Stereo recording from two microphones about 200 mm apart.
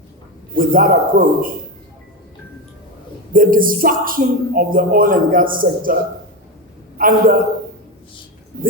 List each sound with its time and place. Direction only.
0.5 s speech: 45° right (ahead or behind)
3.3 s speech: 45° right (ahead or behind)
7.0 s speech: 45° right (ahead or behind)